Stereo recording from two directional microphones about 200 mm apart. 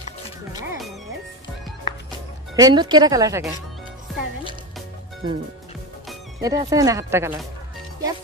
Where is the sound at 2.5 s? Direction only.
20° right (ahead or behind).